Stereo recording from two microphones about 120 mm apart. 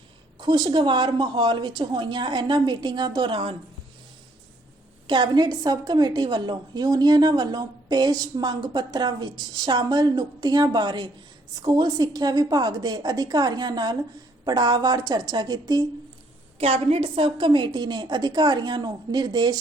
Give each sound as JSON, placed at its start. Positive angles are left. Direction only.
{"t": 0.3, "sound": "a woman's voice", "side_deg": -35}
{"t": 5.0, "sound": "a woman's voice", "side_deg": -40}
{"t": 16.6, "sound": "a woman's voice", "side_deg": -55}